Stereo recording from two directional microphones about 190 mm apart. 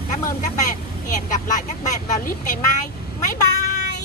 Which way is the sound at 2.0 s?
40° left (ahead or behind).